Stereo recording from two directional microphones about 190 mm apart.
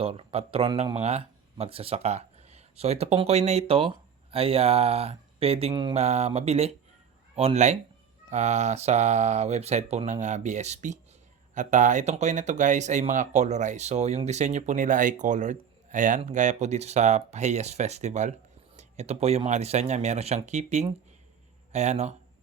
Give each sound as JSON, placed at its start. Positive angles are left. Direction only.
{"t": 0.0, "sound": "speech", "side_deg": -30}